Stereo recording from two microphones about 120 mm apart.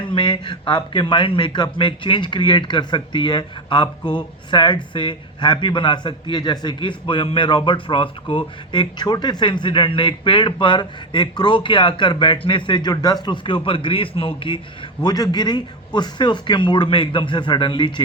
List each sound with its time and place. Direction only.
0.1 s a man's voice: 40° left (ahead or behind)
15.0 s speech: 35° left (ahead or behind)